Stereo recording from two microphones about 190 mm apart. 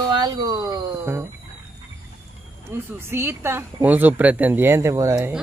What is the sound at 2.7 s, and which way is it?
Speech, 10° right (ahead or behind).